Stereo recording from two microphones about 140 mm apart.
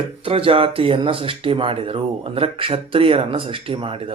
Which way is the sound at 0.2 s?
40° right (ahead or behind).